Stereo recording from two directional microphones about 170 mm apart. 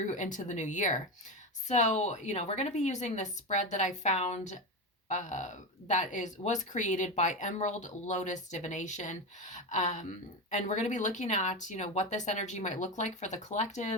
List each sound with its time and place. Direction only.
0.0 s speech: 45° left (ahead or behind)